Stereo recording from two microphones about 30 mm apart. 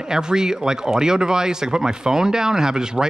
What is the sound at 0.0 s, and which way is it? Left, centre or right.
A man's voice, right.